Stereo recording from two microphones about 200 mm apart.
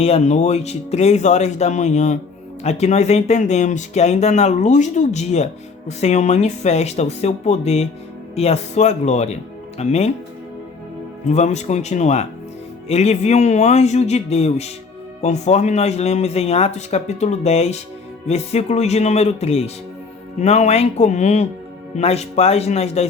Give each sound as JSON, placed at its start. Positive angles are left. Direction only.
{"t": 0.0, "sound": "speech", "side_deg": 35}
{"t": 11.3, "sound": "speech", "side_deg": 35}